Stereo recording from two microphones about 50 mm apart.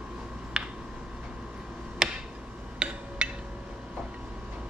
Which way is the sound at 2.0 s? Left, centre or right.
Centre.